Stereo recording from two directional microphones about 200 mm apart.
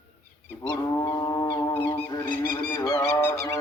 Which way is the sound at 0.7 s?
15° left (ahead or behind).